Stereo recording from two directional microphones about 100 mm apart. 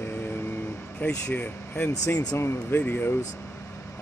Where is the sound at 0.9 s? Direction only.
15° left (ahead or behind).